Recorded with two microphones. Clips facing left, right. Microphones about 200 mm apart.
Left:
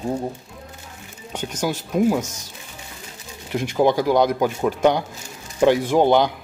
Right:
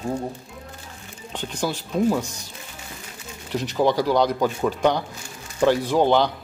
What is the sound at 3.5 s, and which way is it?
A man's voice, 15° left (ahead or behind).